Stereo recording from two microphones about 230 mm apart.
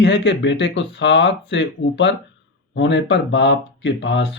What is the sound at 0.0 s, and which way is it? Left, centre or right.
Speech, left.